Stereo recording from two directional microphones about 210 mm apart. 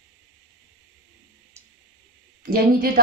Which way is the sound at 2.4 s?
45° right (ahead or behind).